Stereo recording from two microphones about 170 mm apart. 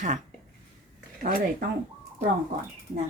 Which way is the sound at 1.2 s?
60° right (ahead or behind).